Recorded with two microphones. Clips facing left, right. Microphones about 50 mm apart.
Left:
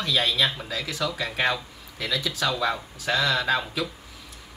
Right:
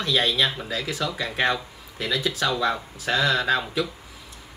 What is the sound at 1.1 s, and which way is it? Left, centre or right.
Speech, centre.